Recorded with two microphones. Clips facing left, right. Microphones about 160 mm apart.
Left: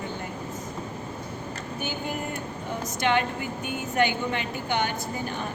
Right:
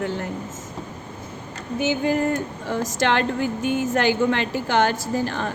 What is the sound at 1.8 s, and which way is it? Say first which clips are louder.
Speech: right 12 dB; 90° right.